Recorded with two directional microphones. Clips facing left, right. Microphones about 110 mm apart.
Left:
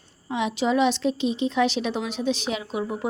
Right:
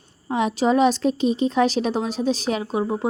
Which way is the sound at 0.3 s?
40° right (ahead or behind).